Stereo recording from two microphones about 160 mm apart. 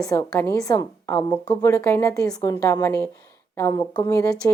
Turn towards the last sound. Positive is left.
turn(degrees=15)  # may be behind; listen again after turning